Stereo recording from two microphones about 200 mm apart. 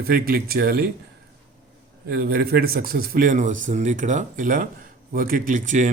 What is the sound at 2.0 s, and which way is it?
A man's voice, 50° right (ahead or behind).